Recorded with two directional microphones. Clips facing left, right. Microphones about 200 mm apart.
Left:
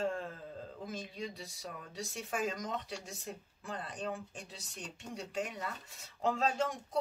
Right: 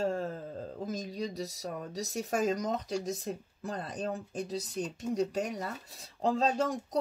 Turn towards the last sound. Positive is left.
turn(degrees=-35)  # may be behind; listen again after turning